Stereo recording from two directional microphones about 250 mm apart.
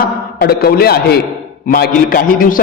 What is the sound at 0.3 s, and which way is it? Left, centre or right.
A man's voice, left.